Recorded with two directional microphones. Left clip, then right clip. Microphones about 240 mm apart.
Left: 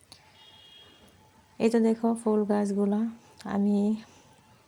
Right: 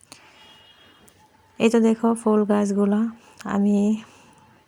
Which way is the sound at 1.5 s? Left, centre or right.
Centre.